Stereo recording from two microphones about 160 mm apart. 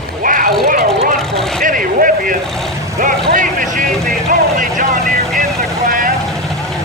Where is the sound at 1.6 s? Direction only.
60° right (ahead or behind).